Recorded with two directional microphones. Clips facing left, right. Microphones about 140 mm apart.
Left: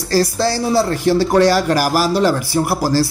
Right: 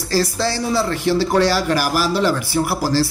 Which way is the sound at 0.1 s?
40° left (ahead or behind).